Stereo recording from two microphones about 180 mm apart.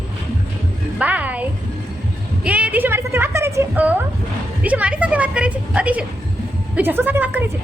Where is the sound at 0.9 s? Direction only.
10° right (ahead or behind).